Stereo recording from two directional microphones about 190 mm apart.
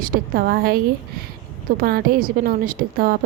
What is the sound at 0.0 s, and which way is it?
Speech, 50° right (ahead or behind).